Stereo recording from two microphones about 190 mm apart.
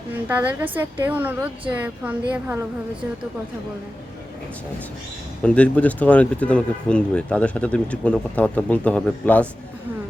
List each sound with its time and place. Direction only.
0.1 s a woman's voice: 10° right (ahead or behind)
5.4 s speech: 5° left (ahead or behind)